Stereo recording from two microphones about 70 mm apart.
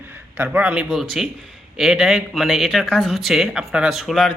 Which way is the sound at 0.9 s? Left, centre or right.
Centre.